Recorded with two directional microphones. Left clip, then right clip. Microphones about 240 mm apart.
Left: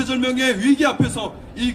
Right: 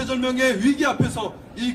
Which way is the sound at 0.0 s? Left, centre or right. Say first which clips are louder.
Left 1 dB; left.